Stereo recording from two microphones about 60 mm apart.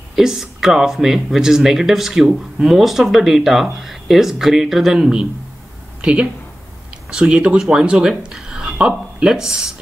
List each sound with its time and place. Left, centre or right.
0.1 s speech: centre